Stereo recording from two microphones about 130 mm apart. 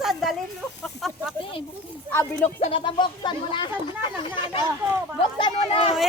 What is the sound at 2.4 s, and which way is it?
Speech, 50° left (ahead or behind).